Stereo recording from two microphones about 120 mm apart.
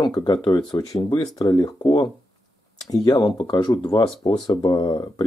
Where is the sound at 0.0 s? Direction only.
35° left (ahead or behind).